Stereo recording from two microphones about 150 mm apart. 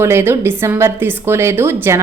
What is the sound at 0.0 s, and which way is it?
A woman's voice, 15° right (ahead or behind).